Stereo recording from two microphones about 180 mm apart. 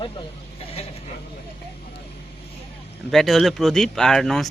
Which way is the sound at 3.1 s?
Centre (ahead or behind).